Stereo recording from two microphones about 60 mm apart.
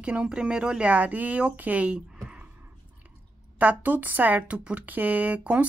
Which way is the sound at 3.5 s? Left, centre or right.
Right.